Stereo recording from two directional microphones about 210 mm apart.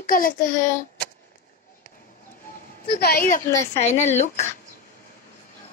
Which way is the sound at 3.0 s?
45° left (ahead or behind).